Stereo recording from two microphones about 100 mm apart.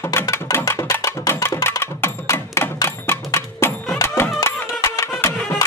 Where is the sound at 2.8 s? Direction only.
25° left (ahead or behind).